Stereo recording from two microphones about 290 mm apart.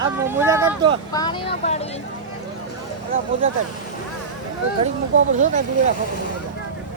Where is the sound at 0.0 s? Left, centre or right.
Centre.